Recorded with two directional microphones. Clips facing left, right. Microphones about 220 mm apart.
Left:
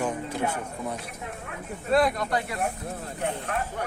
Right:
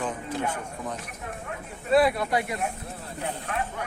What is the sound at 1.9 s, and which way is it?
Speech, 5° right (ahead or behind).